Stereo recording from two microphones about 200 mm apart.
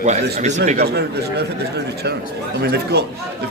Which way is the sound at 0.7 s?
50° right (ahead or behind).